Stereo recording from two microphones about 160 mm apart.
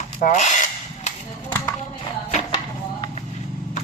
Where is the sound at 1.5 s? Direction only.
15° left (ahead or behind).